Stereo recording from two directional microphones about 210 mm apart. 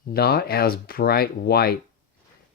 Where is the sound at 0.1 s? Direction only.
45° left (ahead or behind).